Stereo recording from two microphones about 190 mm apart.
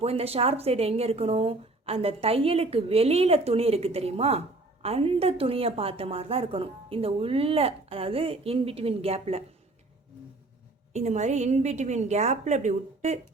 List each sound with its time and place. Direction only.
0.0 s a woman's voice: 30° right (ahead or behind)
10.9 s a woman's voice: 35° right (ahead or behind)